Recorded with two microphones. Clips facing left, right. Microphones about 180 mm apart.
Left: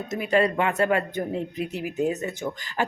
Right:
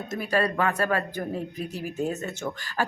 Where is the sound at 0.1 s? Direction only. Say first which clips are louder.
Left 4 dB; 20° left (ahead or behind).